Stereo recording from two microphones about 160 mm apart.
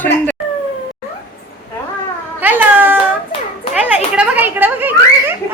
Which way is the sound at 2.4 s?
10° right (ahead or behind).